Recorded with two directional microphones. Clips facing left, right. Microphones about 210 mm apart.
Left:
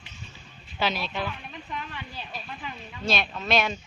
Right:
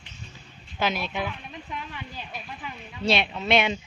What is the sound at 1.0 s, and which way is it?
Speech, 15° right (ahead or behind).